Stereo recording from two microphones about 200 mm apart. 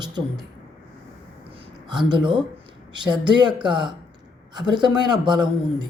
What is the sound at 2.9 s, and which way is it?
A man's voice, 25° right (ahead or behind).